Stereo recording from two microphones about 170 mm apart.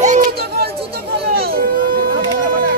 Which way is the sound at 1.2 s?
65° right (ahead or behind).